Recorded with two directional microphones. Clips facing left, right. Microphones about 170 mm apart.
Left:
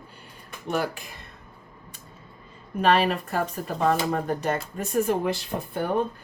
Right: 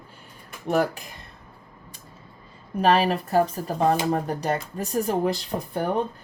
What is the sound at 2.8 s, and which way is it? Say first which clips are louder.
Speech: right 1 dB; 35° right (ahead or behind).